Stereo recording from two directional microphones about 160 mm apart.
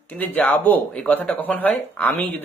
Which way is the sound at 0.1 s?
10° left (ahead or behind).